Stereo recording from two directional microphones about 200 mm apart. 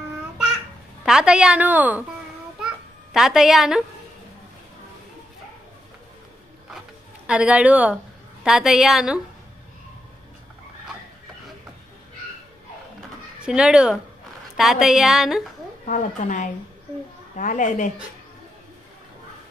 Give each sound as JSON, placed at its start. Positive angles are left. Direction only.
{"t": 1.0, "sound": "a woman's voice", "side_deg": -5}
{"t": 2.6, "sound": "a sound", "side_deg": 0}
{"t": 7.2, "sound": "a woman's voice", "side_deg": -5}
{"t": 13.4, "sound": "a woman's voice", "side_deg": -5}
{"t": 15.8, "sound": "speech", "side_deg": 40}